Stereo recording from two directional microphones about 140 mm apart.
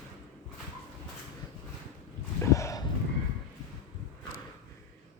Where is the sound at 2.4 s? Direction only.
20° left (ahead or behind).